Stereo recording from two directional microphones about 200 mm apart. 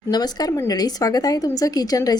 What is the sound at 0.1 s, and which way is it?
Speech, 20° left (ahead or behind).